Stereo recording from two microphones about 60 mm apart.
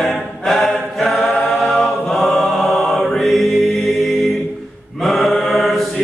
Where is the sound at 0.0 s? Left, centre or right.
Centre.